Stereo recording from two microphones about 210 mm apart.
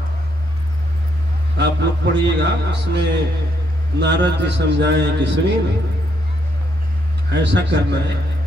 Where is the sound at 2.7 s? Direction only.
55° right (ahead or behind).